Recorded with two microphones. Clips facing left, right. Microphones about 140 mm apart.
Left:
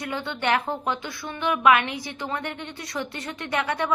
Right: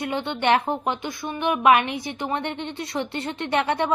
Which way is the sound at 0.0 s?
25° right (ahead or behind).